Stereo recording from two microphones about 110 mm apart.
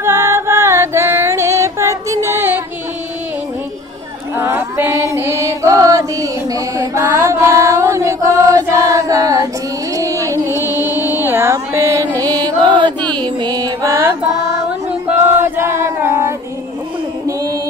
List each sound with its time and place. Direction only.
0.0 s music: 25° right (ahead or behind)
4.4 s music: 20° right (ahead or behind)
9.9 s carnatic music: 30° right (ahead or behind)
11.1 s music: 20° right (ahead or behind); by 12.9 s 45° right (ahead or behind)
13.4 s mantra: 40° right (ahead or behind)
15.0 s choir: 20° right (ahead or behind)